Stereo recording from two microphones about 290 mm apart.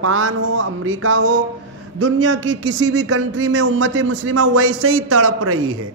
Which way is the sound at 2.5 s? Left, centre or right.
Right.